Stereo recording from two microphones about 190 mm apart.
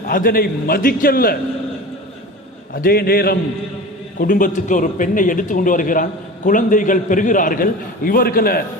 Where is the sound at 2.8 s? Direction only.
50° left (ahead or behind).